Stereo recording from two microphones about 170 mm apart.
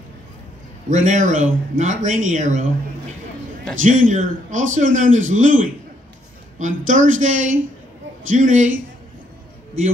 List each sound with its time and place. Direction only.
0.8 s a man's voice: 45° right (ahead or behind)
3.8 s a man's voice: 50° right (ahead or behind)